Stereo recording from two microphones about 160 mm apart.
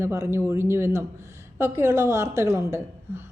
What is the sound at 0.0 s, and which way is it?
A woman's voice, 15° right (ahead or behind).